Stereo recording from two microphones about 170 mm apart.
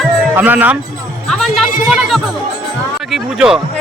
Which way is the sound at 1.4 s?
Centre (ahead or behind).